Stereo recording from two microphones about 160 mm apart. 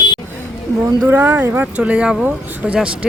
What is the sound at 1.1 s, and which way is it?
Speech, 10° right (ahead or behind).